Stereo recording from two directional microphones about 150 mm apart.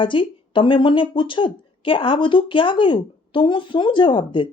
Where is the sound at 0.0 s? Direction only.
35° left (ahead or behind).